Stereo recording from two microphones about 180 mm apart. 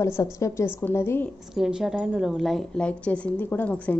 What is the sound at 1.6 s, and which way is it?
A woman's voice, 5° right (ahead or behind).